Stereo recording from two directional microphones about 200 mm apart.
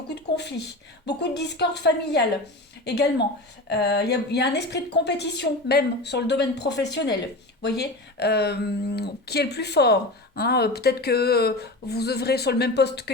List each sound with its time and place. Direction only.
1.0 s speech: 55° left (ahead or behind)